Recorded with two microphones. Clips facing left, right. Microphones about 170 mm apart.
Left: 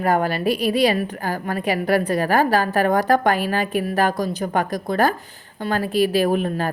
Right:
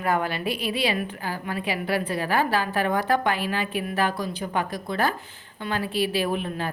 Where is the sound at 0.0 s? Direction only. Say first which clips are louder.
Left 6 dB; 40° left (ahead or behind).